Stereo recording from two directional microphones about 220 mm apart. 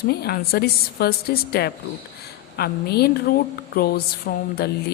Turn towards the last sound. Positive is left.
turn(degrees=45)  # may be behind; listen again after turning